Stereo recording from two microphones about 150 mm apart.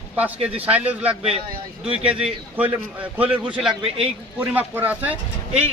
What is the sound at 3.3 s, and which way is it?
Speech, 35° right (ahead or behind).